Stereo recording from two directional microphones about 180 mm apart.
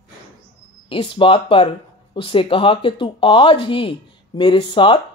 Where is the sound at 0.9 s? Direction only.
30° left (ahead or behind).